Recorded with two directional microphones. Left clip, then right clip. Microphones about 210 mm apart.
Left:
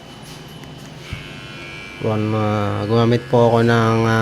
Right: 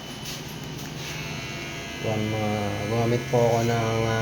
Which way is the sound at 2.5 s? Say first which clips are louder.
Left 8 dB; 55° left (ahead or behind).